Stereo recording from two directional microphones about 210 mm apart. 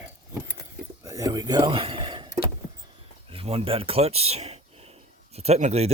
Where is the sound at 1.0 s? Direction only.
15° right (ahead or behind).